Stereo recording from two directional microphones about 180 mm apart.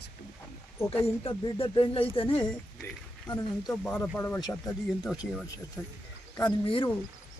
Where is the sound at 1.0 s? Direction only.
30° left (ahead or behind).